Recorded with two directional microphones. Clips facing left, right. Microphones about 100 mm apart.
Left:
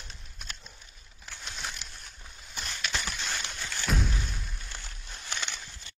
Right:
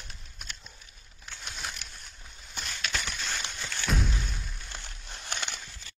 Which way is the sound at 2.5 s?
Centre (ahead or behind).